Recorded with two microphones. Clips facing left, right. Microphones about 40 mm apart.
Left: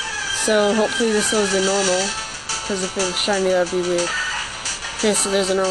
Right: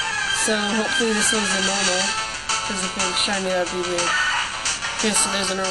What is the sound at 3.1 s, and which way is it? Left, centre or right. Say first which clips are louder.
Speech: left 5 dB; right.